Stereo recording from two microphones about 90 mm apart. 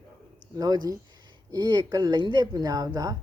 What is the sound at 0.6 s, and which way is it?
A woman's voice, 45° right (ahead or behind).